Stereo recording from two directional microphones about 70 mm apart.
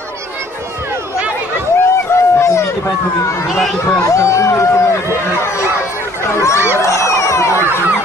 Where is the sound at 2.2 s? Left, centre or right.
Left.